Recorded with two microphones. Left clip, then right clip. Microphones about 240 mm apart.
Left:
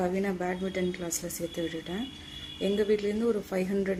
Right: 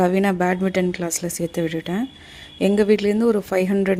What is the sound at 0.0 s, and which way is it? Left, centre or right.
Speech, right.